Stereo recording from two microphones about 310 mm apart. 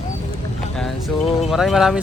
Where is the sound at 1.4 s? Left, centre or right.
Centre.